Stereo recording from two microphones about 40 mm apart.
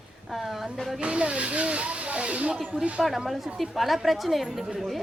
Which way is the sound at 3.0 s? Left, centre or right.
Centre.